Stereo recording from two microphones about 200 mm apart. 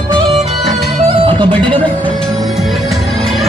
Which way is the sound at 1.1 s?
25° right (ahead or behind).